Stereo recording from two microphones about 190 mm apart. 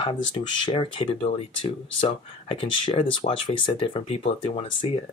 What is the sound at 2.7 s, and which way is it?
Speech, 25° left (ahead or behind).